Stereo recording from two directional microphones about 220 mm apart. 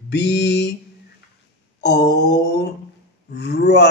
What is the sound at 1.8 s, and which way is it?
Mantra, 50° left (ahead or behind).